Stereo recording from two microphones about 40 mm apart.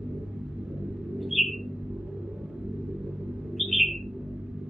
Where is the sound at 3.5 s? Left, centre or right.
Centre.